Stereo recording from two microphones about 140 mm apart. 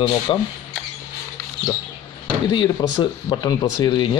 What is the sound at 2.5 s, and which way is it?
Speech, 30° left (ahead or behind).